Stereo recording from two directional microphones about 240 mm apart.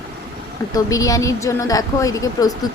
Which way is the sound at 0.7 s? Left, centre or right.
Centre.